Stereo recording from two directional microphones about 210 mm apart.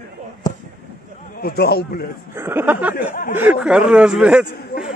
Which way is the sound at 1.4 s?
50° left (ahead or behind).